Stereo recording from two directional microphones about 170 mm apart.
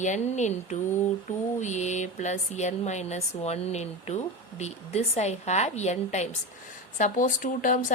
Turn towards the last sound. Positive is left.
turn(degrees=50)  # may be behind; listen again after turning